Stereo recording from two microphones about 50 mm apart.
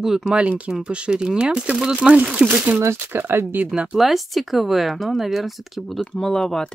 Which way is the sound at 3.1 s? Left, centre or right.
Right.